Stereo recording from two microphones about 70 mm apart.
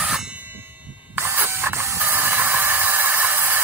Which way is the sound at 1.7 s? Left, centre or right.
Right.